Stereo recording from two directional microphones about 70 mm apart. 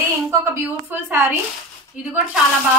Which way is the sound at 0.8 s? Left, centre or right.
Right.